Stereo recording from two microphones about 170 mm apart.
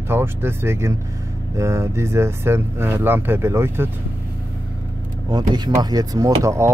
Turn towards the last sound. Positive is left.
turn(degrees=-20)  # may be behind; listen again after turning